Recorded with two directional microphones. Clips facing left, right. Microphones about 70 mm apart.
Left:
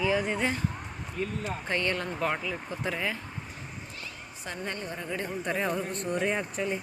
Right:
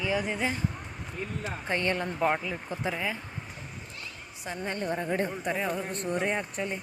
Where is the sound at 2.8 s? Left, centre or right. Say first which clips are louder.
Even; centre.